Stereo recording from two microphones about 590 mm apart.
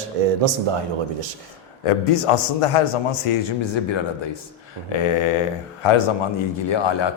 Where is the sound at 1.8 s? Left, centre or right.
Left.